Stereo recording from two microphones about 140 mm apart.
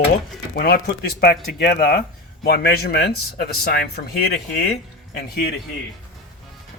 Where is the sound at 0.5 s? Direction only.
90° left.